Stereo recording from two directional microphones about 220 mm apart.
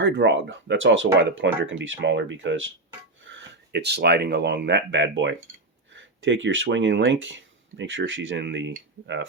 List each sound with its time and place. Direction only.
0.0 s speech: 55° right (ahead or behind)